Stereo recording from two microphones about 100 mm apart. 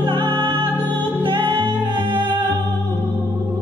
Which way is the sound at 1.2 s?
55° right (ahead or behind).